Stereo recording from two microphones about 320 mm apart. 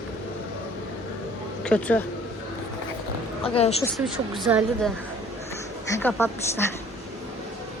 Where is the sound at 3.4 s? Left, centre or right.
Centre.